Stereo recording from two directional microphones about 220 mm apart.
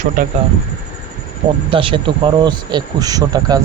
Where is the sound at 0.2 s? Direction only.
35° right (ahead or behind).